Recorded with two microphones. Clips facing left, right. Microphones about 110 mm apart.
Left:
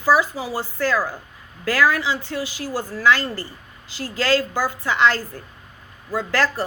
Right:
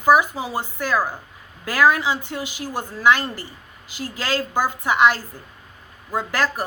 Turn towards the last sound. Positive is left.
turn(degrees=-15)  # may be behind; listen again after turning